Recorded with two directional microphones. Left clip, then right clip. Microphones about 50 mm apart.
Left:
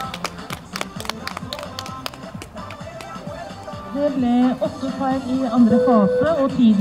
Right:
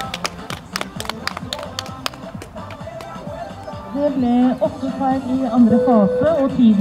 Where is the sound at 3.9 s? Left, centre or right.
Left.